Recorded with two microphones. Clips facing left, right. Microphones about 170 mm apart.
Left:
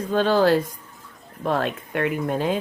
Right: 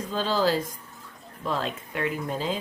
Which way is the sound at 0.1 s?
60° left (ahead or behind).